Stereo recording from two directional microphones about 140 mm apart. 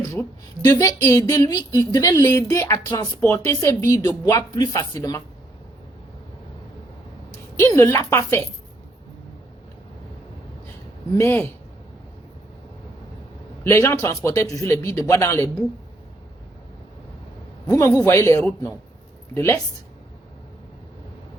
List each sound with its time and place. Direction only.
0.1 s speech: 25° left (ahead or behind)
7.6 s speech: 20° left (ahead or behind)
11.2 s a man's voice: 15° left (ahead or behind)
13.7 s speech: 20° left (ahead or behind)
17.7 s speech: 20° left (ahead or behind)